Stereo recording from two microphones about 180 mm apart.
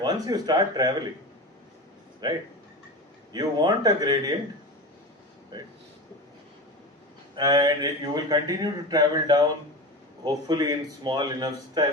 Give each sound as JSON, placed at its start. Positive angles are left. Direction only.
{"t": 0.0, "sound": "speech", "side_deg": -20}
{"t": 2.2, "sound": "speech", "side_deg": -25}
{"t": 7.3, "sound": "speech", "side_deg": -20}